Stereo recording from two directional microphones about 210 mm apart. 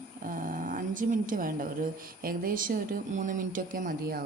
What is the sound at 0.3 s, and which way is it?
Speech, 40° right (ahead or behind).